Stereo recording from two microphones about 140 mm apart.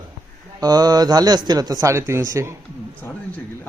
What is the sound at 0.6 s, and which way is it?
Speech, 30° right (ahead or behind).